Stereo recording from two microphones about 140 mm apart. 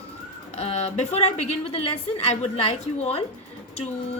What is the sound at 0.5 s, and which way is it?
A woman's voice, 50° left (ahead or behind).